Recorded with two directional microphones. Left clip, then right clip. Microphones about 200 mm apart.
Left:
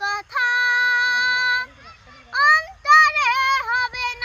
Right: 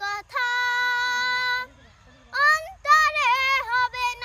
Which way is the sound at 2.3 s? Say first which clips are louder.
Left 4 dB; 30° right (ahead or behind).